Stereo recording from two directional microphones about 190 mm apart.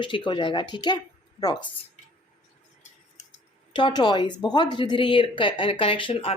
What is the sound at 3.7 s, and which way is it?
Speech, 25° left (ahead or behind).